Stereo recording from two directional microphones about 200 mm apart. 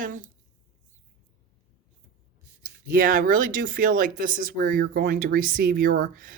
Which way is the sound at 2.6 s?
45° right (ahead or behind).